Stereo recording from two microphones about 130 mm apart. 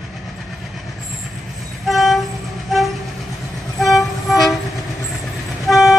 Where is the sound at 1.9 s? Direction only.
Centre (ahead or behind).